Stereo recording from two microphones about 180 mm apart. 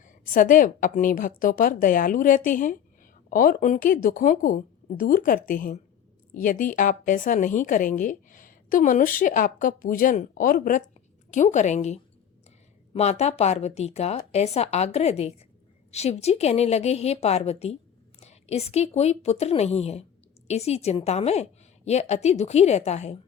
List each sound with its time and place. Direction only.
0.0 s a woman's voice: 45° left (ahead or behind)